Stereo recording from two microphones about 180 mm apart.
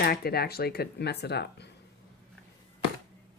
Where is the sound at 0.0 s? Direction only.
60° left (ahead or behind).